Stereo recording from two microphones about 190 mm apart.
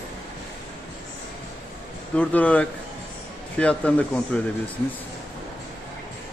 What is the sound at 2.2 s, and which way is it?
Speech, 5° left (ahead or behind).